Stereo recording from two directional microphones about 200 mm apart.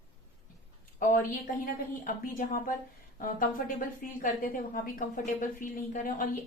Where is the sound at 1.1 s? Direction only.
45° left (ahead or behind).